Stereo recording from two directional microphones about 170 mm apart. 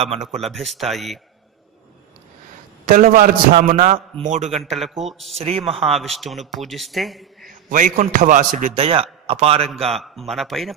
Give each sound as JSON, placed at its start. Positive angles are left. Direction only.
{"t": 0.0, "sound": "a man's voice", "side_deg": -40}
{"t": 0.4, "sound": "a man's voice", "side_deg": 0}
{"t": 2.9, "sound": "a man's voice", "side_deg": -55}
{"t": 4.6, "sound": "a man's voice", "side_deg": 0}
{"t": 5.4, "sound": "a man's voice", "side_deg": -35}
{"t": 5.9, "sound": "a man's voice", "side_deg": 0}
{"t": 7.7, "sound": "a man's voice", "side_deg": -50}
{"t": 8.7, "sound": "a man's voice", "side_deg": -35}
{"t": 9.9, "sound": "a man's voice", "side_deg": 0}